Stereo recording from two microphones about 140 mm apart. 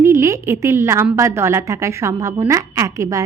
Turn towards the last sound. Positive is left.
turn(degrees=-25)  # may be behind; listen again after turning